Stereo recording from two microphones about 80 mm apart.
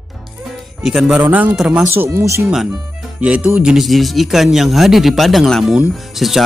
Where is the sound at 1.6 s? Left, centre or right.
Centre.